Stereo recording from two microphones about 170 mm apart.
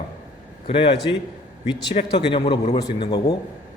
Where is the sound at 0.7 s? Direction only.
35° left (ahead or behind).